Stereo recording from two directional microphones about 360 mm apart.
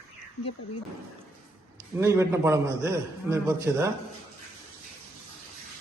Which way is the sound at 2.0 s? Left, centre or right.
Centre.